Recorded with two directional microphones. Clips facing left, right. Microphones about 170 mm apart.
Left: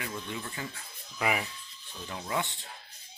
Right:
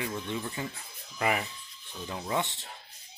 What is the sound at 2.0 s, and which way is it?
Speech, 20° right (ahead or behind).